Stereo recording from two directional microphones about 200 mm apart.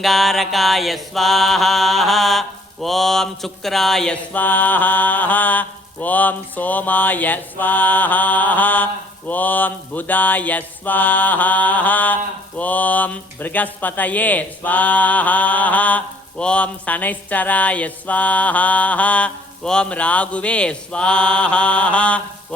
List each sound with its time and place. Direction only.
0.0 s mantra: centre (ahead or behind)